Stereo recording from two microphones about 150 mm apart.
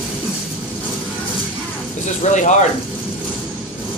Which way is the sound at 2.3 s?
55° left (ahead or behind).